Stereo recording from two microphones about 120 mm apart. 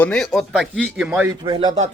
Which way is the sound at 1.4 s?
35° right (ahead or behind).